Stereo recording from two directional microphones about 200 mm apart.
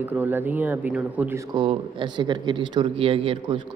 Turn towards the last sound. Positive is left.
turn(degrees=-25)  # may be behind; listen again after turning